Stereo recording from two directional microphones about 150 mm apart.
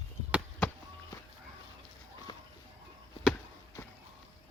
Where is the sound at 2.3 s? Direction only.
30° left (ahead or behind).